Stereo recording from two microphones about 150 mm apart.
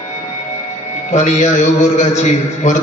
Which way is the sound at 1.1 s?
55° left (ahead or behind).